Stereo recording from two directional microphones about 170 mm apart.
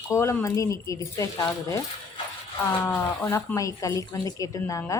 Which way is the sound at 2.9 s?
10° left (ahead or behind).